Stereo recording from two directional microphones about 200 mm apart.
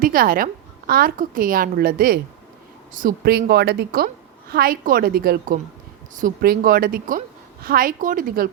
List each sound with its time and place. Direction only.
0.0 s a woman's voice: 45° right (ahead or behind)